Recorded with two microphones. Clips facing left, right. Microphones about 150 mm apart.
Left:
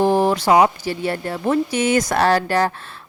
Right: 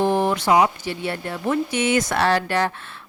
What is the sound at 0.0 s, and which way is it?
Speech, 35° left (ahead or behind).